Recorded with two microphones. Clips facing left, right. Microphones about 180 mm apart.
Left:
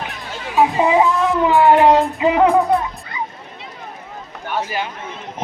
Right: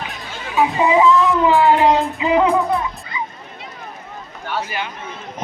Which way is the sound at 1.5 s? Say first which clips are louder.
Left 4 dB; 60° left (ahead or behind).